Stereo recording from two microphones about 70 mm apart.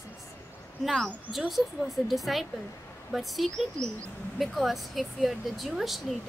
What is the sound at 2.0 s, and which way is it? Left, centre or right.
A woman's voice, centre.